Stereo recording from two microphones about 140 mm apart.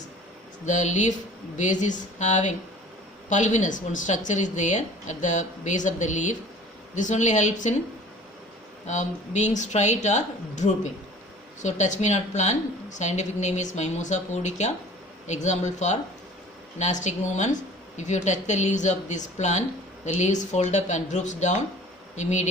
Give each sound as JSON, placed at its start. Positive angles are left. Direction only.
{"t": 0.6, "sound": "a woman's voice", "side_deg": 60}
{"t": 8.9, "sound": "a woman's voice", "side_deg": 60}